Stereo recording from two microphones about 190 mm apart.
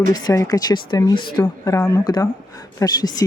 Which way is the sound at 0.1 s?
20° left (ahead or behind).